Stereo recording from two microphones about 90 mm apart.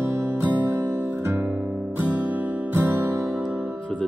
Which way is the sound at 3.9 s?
10° left (ahead or behind).